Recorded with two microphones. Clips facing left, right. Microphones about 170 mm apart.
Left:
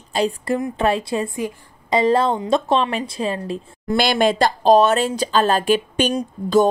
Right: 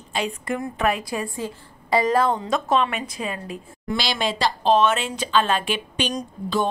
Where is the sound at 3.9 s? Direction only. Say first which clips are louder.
Left 9 dB; 50° left (ahead or behind).